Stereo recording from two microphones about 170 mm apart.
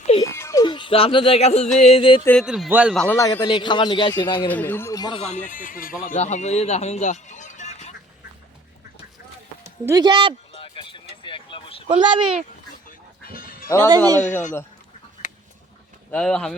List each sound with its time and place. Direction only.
0.2 s music: 15° left (ahead or behind)
0.6 s speech: 30° left (ahead or behind)
1.8 s music: 35° left (ahead or behind)
2.2 s speech: 5° left (ahead or behind)
2.5 s a man's voice: 5° right (ahead or behind)
3.0 s a man's voice: 15° left (ahead or behind)
4.1 s speech: 15° left (ahead or behind)
5.2 s speech: 45° left (ahead or behind)
9.8 s speech: 20° right (ahead or behind)
10.5 s a sound: 30° left (ahead or behind)
11.9 s speech: 30° right (ahead or behind)
13.2 s music: 55° left (ahead or behind)
13.7 s speech: 20° right (ahead or behind)
16.1 s a man's voice: 5° left (ahead or behind)